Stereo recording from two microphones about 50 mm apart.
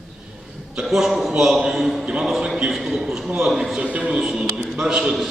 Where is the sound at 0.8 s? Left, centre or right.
Centre.